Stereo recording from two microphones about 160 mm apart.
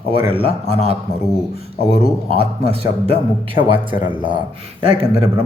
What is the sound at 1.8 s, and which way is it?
A man's voice, 40° right (ahead or behind).